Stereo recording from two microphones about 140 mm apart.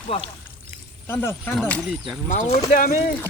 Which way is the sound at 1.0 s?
15° left (ahead or behind).